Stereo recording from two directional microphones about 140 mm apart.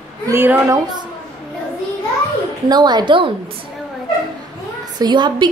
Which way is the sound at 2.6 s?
30° right (ahead or behind).